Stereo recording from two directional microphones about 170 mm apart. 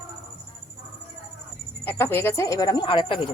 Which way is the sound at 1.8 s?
10° left (ahead or behind).